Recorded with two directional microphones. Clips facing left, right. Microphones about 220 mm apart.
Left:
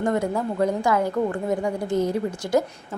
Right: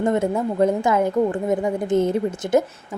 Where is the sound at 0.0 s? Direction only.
25° right (ahead or behind).